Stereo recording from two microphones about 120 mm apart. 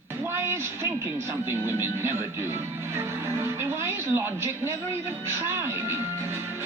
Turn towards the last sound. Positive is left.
turn(degrees=-20)  # may be behind; listen again after turning